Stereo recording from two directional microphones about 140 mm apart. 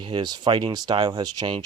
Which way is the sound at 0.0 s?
35° right (ahead or behind).